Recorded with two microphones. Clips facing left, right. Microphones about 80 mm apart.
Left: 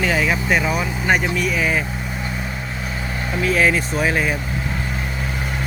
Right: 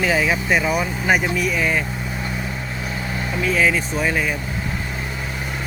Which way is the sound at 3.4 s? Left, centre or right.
Centre.